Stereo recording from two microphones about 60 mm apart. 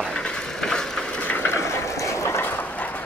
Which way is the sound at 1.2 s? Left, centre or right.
Left.